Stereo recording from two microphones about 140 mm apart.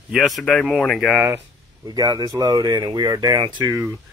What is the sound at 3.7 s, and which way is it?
Speech, 20° right (ahead or behind).